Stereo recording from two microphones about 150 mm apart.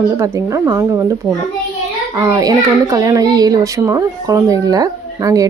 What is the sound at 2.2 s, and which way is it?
A child's voice, 25° right (ahead or behind).